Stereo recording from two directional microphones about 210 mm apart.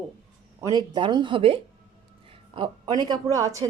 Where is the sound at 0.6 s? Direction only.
20° right (ahead or behind).